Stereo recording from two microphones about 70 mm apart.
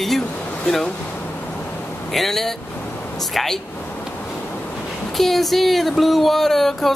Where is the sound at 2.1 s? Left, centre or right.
Centre.